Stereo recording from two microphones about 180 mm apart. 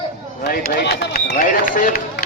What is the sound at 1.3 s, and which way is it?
Speech, 45° left (ahead or behind).